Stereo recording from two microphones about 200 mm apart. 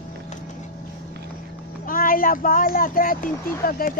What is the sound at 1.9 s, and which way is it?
Speech, 45° left (ahead or behind).